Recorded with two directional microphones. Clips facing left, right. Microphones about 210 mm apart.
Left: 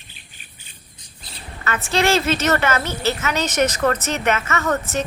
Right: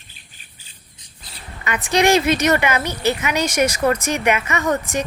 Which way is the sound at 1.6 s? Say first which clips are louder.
Right 3 dB; 15° right (ahead or behind).